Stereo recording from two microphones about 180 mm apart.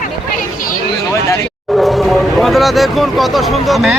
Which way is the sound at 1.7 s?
Centre (ahead or behind).